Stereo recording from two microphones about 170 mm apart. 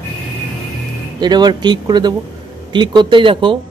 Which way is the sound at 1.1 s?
25° right (ahead or behind).